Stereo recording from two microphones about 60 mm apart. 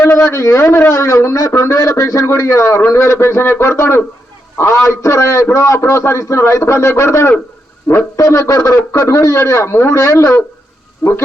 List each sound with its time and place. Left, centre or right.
0.0 s a sound: left
0.3 s a man's voice: left
0.9 s a man's voice: left